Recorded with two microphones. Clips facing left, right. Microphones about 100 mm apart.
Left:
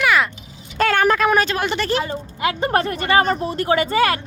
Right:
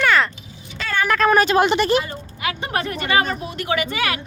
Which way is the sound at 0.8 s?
55° left (ahead or behind).